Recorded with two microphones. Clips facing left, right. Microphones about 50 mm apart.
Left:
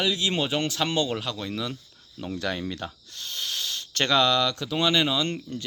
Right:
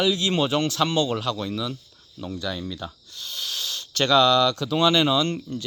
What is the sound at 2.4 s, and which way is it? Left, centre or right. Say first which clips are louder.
Speech: left 1 dB; left.